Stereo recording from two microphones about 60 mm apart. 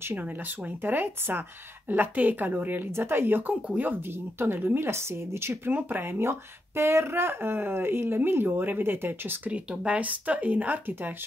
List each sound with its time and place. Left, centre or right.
0.1 s speech: right
5.7 s speech: right
9.5 s speech: right